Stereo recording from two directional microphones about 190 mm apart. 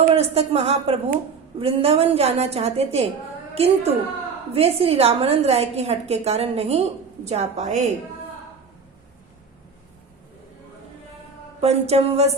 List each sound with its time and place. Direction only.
0.1 s a woman's voice: 35° right (ahead or behind)
11.6 s a woman's voice: 35° right (ahead or behind)